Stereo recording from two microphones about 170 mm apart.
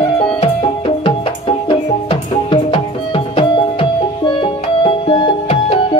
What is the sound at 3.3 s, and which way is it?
Music, 30° left (ahead or behind).